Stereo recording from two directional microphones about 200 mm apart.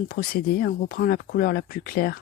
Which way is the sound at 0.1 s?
45° left (ahead or behind).